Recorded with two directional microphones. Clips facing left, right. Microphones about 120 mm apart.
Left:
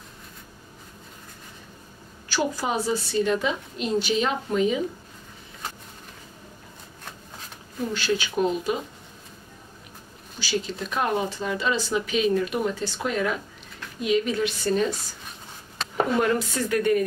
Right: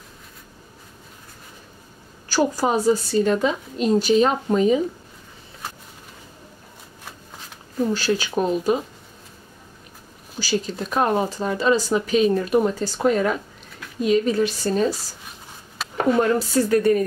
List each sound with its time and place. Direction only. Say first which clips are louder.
2.2 s speech: right 6 dB; 40° right (ahead or behind)
7.9 s speech: right 1 dB; 40° right (ahead or behind)
10.4 s speech: right 4 dB; 40° right (ahead or behind)
15.8 s a sound: right 1 dB; 5° right (ahead or behind)
16.2 s speech: right 4 dB; 35° right (ahead or behind)